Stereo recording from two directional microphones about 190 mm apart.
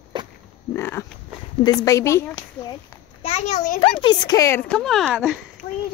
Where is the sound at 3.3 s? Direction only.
40° left (ahead or behind).